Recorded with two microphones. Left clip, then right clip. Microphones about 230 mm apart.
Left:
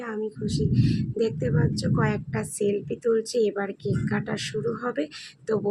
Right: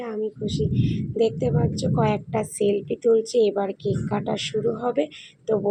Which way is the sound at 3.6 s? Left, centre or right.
Left.